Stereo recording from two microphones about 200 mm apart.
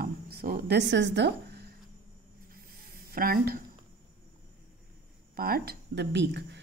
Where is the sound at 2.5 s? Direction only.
45° right (ahead or behind).